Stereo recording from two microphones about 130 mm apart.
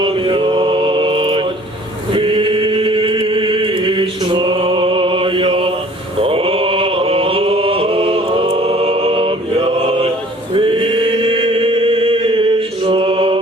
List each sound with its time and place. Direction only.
0.0 s mantra: 40° right (ahead or behind)
2.1 s chant: 40° right (ahead or behind)
10.5 s chant: 45° right (ahead or behind)